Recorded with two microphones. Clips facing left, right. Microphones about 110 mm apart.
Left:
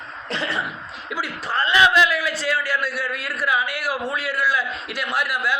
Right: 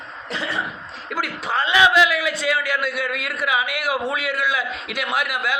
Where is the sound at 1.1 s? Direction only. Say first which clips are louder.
Right 2 dB; 55° right (ahead or behind).